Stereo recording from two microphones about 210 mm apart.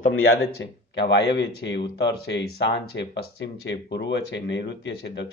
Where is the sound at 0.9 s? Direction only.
55° left (ahead or behind).